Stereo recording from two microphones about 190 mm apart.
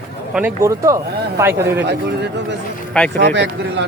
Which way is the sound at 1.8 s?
60° right (ahead or behind).